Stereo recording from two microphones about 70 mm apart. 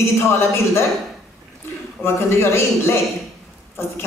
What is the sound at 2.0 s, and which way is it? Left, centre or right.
Speech, left.